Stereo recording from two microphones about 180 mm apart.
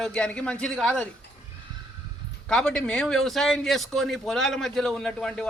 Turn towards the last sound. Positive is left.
turn(degrees=5)  # may be behind; listen again after turning